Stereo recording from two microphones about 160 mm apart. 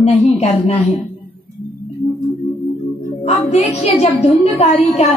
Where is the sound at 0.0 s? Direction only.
40° left (ahead or behind).